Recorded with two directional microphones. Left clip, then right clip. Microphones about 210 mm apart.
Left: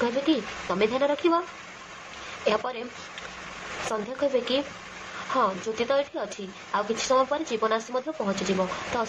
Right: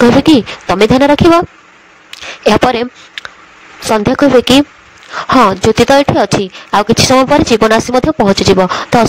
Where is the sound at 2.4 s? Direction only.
55° right (ahead or behind).